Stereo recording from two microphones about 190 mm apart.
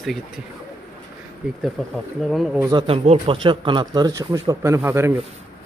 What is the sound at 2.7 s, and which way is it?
Speech, 30° right (ahead or behind).